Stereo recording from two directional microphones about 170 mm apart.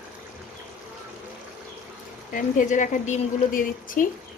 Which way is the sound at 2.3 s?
50° left (ahead or behind).